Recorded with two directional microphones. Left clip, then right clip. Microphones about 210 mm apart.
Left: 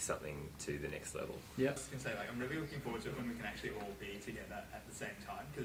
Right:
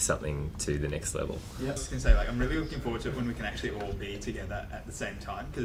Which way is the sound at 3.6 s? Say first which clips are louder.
Right 8 dB; 30° right (ahead or behind).